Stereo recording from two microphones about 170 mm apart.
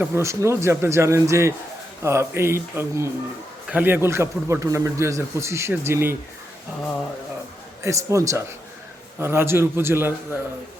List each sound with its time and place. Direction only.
0.0 s a man's voice: 15° right (ahead or behind)
7.8 s a man's voice: 20° right (ahead or behind)